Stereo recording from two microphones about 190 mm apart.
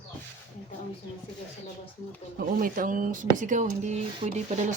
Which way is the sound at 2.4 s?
45° right (ahead or behind).